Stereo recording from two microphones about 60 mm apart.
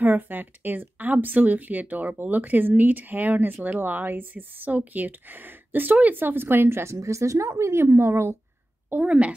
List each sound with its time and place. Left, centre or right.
0.0 s speech: right
9.0 s a woman's voice: right